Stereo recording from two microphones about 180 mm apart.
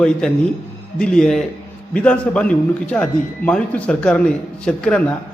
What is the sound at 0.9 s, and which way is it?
A man's voice, 5° left (ahead or behind).